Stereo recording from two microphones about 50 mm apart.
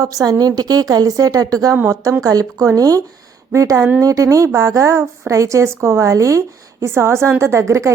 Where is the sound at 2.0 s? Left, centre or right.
Right.